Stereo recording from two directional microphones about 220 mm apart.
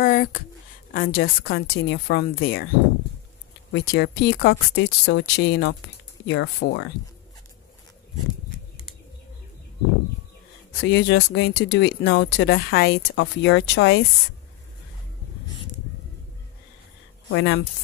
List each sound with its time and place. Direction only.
0.0 s a sound: 40° left (ahead or behind)
0.9 s speech: 45° left (ahead or behind)
3.7 s speech: 50° left (ahead or behind)
10.8 s speech: 55° left (ahead or behind)
17.3 s speech: 55° left (ahead or behind)